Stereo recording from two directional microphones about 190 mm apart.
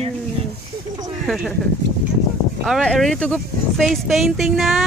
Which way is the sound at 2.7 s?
Centre (ahead or behind).